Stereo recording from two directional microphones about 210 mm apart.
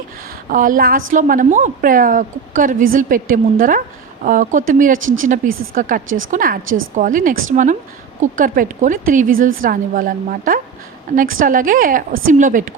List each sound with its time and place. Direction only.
0.5 s a woman's voice: 40° right (ahead or behind)
4.9 s speech: 70° right (ahead or behind)
5.4 s a woman's voice: 35° right (ahead or behind)